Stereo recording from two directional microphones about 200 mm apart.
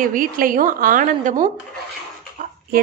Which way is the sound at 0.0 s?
45° right (ahead or behind).